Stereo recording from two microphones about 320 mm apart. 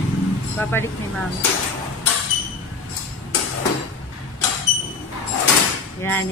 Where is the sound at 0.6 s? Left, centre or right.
Centre.